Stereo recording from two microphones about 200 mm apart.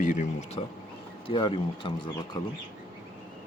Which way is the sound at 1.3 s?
25° left (ahead or behind).